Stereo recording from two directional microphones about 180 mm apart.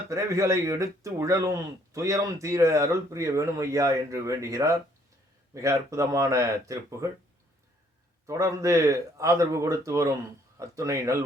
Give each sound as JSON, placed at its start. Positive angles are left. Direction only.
{"t": 0.1, "sound": "speech", "side_deg": -15}
{"t": 8.3, "sound": "speech", "side_deg": -15}